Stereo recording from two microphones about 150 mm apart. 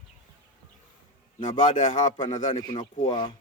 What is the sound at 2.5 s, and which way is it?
Speech, 30° left (ahead or behind).